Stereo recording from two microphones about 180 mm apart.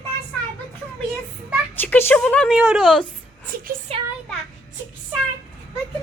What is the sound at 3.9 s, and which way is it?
Speech, 35° right (ahead or behind).